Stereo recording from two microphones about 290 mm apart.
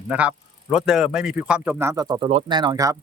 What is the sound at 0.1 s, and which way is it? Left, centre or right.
A man's voice, centre.